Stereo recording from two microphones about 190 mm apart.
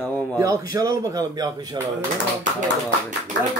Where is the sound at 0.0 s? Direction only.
10° left (ahead or behind).